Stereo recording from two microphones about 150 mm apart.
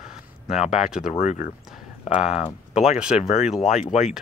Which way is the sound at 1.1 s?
50° left (ahead or behind).